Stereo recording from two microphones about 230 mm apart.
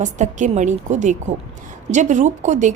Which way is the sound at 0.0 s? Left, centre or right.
Right.